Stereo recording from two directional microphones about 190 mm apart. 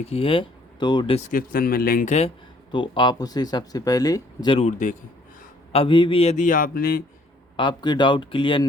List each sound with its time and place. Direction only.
0.1 s speech: 30° left (ahead or behind)
1.3 s speech: 50° left (ahead or behind)
2.7 s speech: 25° left (ahead or behind)
5.7 s a man's voice: 25° left (ahead or behind); by 7.0 s 50° left (ahead or behind)
7.5 s speech: 25° left (ahead or behind)